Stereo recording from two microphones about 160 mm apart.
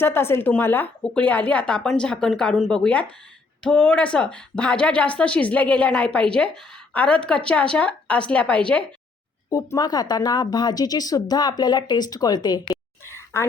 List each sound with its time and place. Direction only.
0.0 s speech: 15° left (ahead or behind)
9.5 s a woman's voice: 20° left (ahead or behind)
13.1 s a sound: 15° left (ahead or behind)